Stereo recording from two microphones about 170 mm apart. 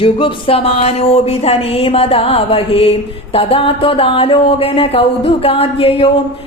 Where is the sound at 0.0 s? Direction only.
30° left (ahead or behind).